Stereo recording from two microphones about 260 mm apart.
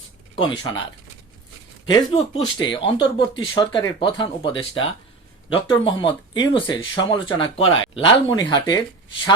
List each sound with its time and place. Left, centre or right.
0.3 s speech: centre
1.9 s speech: centre